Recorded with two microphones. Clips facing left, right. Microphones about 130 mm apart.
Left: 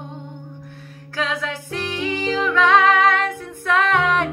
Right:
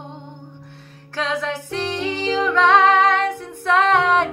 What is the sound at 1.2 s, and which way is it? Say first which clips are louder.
Music: right 2 dB; 35° right (ahead or behind).